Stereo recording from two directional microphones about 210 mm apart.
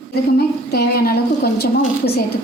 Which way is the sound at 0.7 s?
50° left (ahead or behind).